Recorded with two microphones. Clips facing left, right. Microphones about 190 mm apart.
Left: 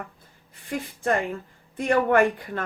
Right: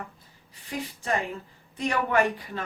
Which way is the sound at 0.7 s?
55° left (ahead or behind).